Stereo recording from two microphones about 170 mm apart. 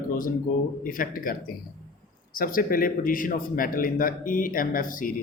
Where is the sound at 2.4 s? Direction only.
55° left (ahead or behind).